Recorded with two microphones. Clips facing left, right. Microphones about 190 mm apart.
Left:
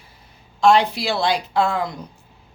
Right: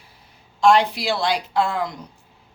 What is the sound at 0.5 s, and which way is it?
Speech, 15° right (ahead or behind).